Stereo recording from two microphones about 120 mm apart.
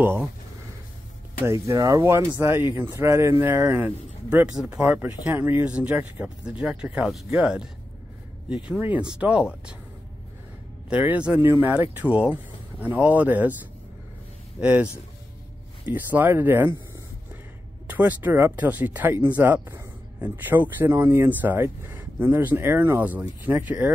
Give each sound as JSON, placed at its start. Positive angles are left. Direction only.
{"t": 1.4, "sound": "a man's voice", "side_deg": -25}
{"t": 8.6, "sound": "speech", "side_deg": -10}
{"t": 10.9, "sound": "speech", "side_deg": -10}
{"t": 14.6, "sound": "speech", "side_deg": -10}
{"t": 17.8, "sound": "speech", "side_deg": -15}